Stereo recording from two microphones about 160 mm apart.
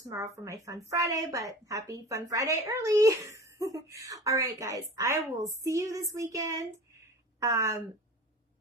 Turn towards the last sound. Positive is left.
turn(degrees=-20)  # may be behind; listen again after turning